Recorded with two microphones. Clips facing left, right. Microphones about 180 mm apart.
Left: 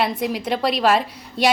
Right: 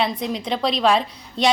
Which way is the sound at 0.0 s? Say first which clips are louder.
Left 1 dB; 5° left (ahead or behind).